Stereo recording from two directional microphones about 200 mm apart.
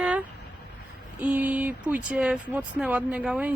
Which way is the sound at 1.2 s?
5° right (ahead or behind).